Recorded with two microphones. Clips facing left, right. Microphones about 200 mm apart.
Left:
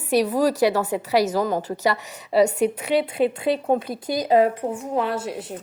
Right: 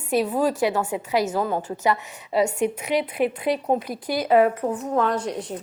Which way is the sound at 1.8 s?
80° left.